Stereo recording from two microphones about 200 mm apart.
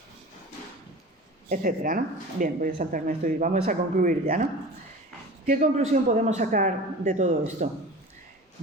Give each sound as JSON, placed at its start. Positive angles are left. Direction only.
{"t": 1.5, "sound": "speech", "side_deg": -45}
{"t": 5.5, "sound": "a man's voice", "side_deg": -35}